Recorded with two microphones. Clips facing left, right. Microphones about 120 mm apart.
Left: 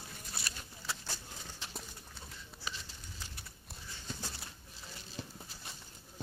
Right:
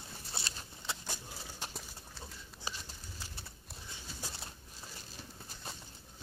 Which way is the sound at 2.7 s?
35° right (ahead or behind).